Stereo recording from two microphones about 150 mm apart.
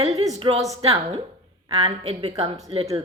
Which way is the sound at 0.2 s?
40° right (ahead or behind).